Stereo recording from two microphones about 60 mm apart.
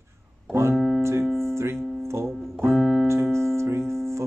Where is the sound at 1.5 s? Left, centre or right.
Right.